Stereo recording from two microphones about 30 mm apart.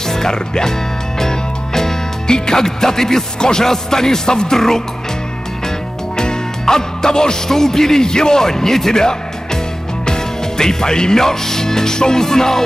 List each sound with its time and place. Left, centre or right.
0.1 s speech: centre
1.2 s music: centre
3.3 s speech: left
6.1 s speech: left